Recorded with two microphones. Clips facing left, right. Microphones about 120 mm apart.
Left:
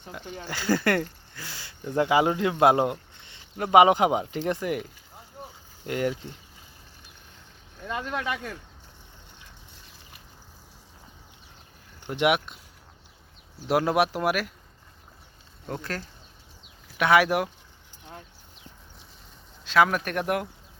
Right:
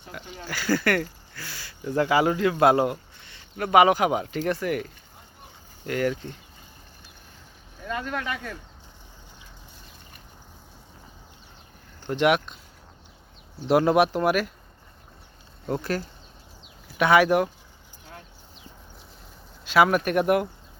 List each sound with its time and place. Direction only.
0.1 s speech: 20° left (ahead or behind)
7.9 s speech: 20° left (ahead or behind)
12.0 s speech: 10° left (ahead or behind)
13.6 s speech: centre (ahead or behind)
15.6 s speech: 5° right (ahead or behind)
19.6 s speech: 5° right (ahead or behind)